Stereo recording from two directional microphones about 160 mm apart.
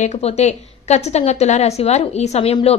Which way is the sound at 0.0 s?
45° left (ahead or behind).